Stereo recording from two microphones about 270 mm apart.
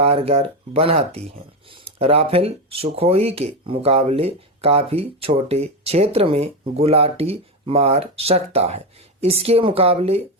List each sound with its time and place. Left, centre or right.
0.0 s speech: right